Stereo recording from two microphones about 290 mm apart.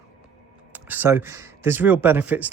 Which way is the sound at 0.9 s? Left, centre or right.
Centre.